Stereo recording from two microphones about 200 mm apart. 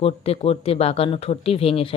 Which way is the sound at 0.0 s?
30° left (ahead or behind).